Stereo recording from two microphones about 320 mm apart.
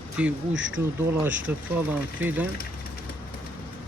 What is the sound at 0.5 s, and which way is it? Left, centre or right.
Speech, right.